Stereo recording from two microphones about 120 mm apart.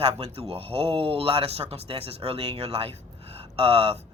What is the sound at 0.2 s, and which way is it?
Speech, 60° right (ahead or behind).